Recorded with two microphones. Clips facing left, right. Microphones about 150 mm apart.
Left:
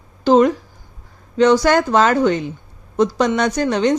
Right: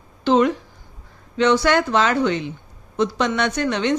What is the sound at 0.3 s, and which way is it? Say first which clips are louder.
Speech: left 4 dB; 40° left (ahead or behind).